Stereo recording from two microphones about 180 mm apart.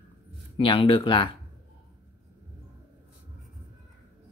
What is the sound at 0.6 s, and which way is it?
Speech, 30° left (ahead or behind).